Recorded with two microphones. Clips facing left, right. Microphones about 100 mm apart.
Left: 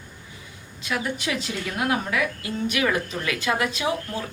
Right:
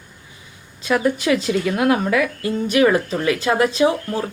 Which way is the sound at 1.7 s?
55° right (ahead or behind).